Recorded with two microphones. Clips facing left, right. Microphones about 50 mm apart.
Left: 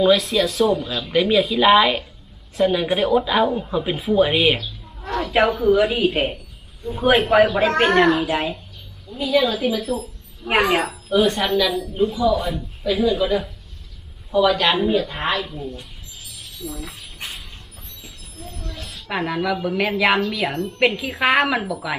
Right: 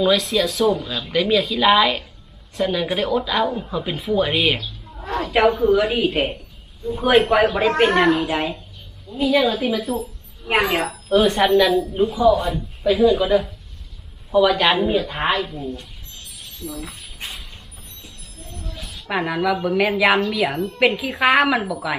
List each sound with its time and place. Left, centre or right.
0.0 s a woman's voice: centre
11.3 s a woman's voice: centre
12.1 s a woman's voice: centre
12.4 s a woman's voice: centre
18.8 s a woman's voice: centre